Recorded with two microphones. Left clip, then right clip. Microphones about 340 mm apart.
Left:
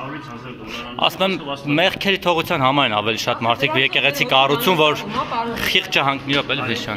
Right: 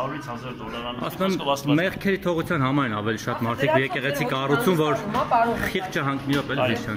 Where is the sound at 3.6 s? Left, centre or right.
Left.